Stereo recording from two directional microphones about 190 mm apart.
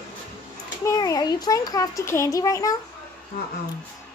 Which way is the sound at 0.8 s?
20° left (ahead or behind).